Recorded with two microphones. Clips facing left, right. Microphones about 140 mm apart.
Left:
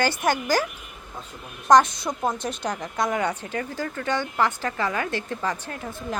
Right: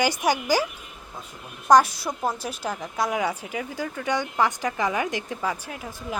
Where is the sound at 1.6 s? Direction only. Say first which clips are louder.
Even; 10° right (ahead or behind).